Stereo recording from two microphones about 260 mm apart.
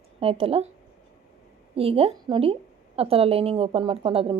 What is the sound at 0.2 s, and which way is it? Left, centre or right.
Speech, right.